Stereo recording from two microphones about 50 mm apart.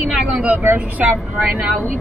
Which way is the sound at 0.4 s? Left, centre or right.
Right.